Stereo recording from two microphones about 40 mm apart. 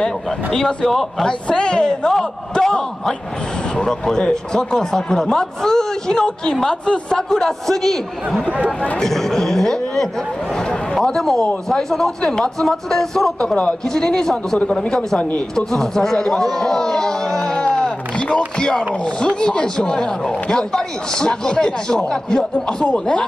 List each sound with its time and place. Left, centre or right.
0.0 s speech: centre
2.0 s speech: centre
4.0 s speech: centre
11.1 s speech: centre
15.5 s speech: centre
19.2 s speech: centre